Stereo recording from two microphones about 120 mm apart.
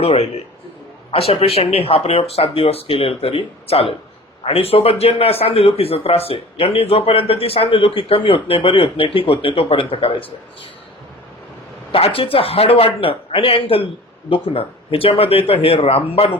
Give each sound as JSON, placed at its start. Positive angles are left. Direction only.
{"t": 0.0, "sound": "a man's voice", "side_deg": 55}
{"t": 11.9, "sound": "a man's voice", "side_deg": 50}